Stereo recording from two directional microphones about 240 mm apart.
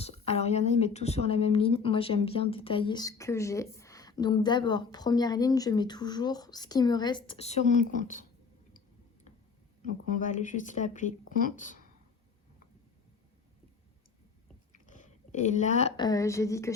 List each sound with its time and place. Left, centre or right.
0.0 s a woman's voice: left
10.2 s speech: left
14.7 s chewing: left
16.0 s a woman's voice: centre